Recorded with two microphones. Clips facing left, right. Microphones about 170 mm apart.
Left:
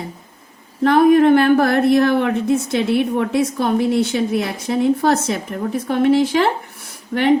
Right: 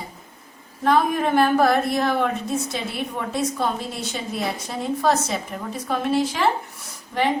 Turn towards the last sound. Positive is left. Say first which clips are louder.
# left 7 dB
turn(degrees=65)  # may be behind; listen again after turning